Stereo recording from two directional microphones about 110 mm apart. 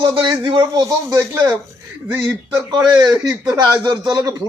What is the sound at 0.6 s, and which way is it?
Speech, 30° right (ahead or behind).